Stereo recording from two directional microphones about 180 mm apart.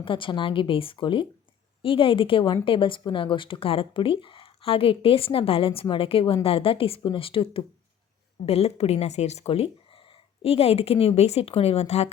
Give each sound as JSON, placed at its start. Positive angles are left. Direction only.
{"t": 0.0, "sound": "speech", "side_deg": 30}